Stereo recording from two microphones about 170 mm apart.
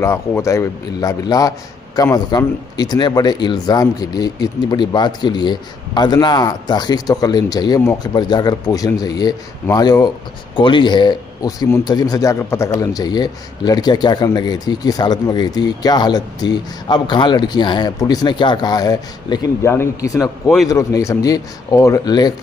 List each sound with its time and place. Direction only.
0.0 s a man's voice: 15° left (ahead or behind)